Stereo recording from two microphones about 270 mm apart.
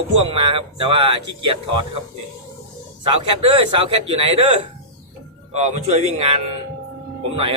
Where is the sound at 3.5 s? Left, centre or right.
Centre.